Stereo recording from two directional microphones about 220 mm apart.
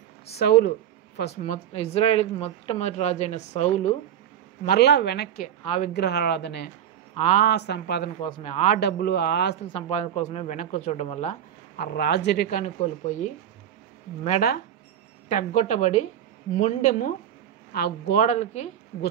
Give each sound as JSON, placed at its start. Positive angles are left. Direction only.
{"t": 0.3, "sound": "a woman's voice", "side_deg": 50}
{"t": 1.5, "sound": "a woman's voice", "side_deg": 30}
{"t": 4.6, "sound": "a man's voice", "side_deg": 50}
{"t": 5.6, "sound": "speech", "side_deg": 25}
{"t": 5.9, "sound": "a man's voice", "side_deg": 50}
{"t": 7.2, "sound": "a woman's voice", "side_deg": 30}
{"t": 7.4, "sound": "a man's voice", "side_deg": 50}
{"t": 8.2, "sound": "speech", "side_deg": 25}
{"t": 8.7, "sound": "a man's voice", "side_deg": 50}
{"t": 9.6, "sound": "speech", "side_deg": 25}
{"t": 11.8, "sound": "a woman's voice", "side_deg": 45}
{"t": 15.2, "sound": "a woman's voice", "side_deg": 35}
{"t": 17.7, "sound": "a man's voice", "side_deg": 45}
{"t": 18.2, "sound": "a woman's voice", "side_deg": 30}